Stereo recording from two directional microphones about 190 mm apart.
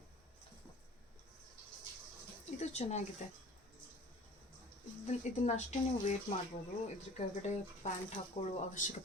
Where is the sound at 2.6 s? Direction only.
35° left (ahead or behind).